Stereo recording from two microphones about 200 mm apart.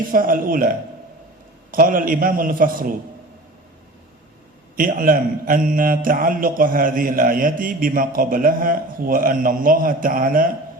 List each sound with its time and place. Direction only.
0.1 s a man's voice: 45° right (ahead or behind)
1.7 s a man's voice: 45° right (ahead or behind)
4.8 s a man's voice: 45° right (ahead or behind)